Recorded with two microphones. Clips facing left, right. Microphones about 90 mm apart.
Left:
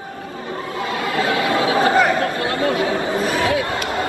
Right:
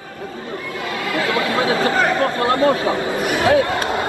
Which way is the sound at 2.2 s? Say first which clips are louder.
Right 4 dB; 35° right (ahead or behind).